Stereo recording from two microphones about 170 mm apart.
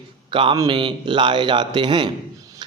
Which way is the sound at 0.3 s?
30° right (ahead or behind).